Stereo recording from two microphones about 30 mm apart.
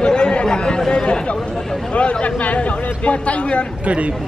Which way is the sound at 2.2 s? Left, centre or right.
Left.